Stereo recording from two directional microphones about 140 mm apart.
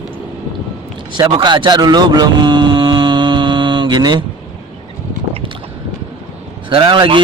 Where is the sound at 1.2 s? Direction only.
35° right (ahead or behind).